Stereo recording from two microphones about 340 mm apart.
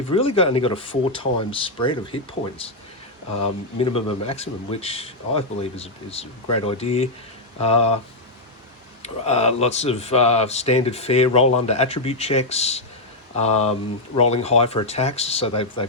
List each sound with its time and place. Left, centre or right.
0.1 s speech: centre
9.0 s speech: centre